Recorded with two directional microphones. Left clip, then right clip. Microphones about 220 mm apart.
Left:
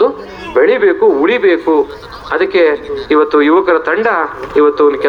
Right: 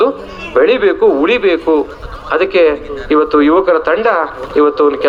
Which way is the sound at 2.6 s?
45° right (ahead or behind).